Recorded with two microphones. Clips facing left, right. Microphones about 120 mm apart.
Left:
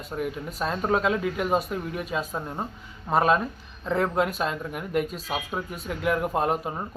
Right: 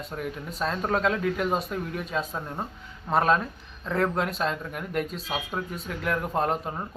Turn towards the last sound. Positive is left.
turn(degrees=5)  # may be behind; listen again after turning